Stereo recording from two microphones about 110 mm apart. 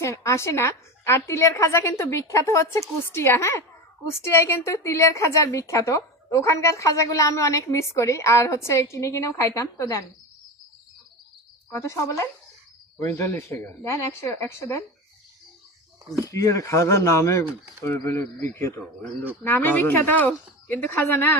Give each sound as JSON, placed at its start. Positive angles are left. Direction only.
{"t": 0.0, "sound": "a woman's voice", "side_deg": 25}
{"t": 11.7, "sound": "a woman's voice", "side_deg": 25}
{"t": 16.3, "sound": "a woman's voice", "side_deg": 30}